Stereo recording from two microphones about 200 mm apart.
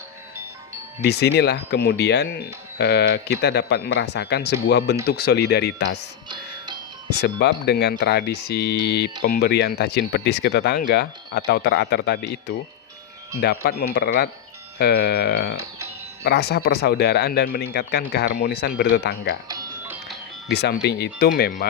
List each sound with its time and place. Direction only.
1.0 s speech: 55° left (ahead or behind)
7.2 s speech: 55° left (ahead or behind)
19.5 s music: 20° right (ahead or behind)
20.5 s speech: 55° left (ahead or behind)